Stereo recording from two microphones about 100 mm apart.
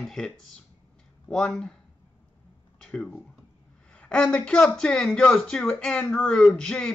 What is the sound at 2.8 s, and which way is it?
Speech, 10° left (ahead or behind).